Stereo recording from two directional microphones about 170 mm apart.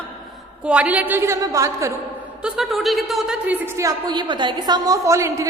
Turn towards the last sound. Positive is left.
turn(degrees=-15)  # may be behind; listen again after turning